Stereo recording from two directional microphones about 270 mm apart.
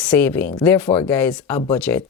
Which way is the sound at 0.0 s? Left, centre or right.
Centre.